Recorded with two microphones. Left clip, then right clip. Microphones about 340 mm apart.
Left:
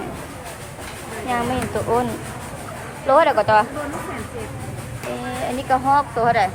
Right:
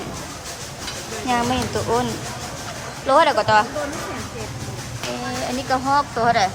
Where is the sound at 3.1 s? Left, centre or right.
Centre.